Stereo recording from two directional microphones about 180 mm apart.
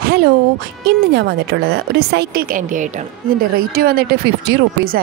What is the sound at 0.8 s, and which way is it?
A woman's voice, 70° right (ahead or behind).